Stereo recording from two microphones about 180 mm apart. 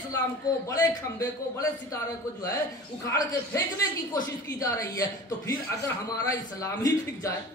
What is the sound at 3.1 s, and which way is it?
A man's voice, 15° left (ahead or behind).